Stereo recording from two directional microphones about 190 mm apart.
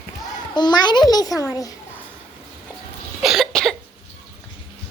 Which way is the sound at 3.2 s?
Centre (ahead or behind).